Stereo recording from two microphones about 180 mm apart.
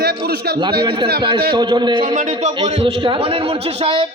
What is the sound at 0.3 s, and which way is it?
Speech, 65° right (ahead or behind).